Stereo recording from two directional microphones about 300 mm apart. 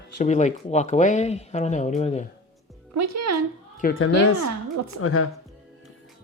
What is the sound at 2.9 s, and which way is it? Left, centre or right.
Speech, right.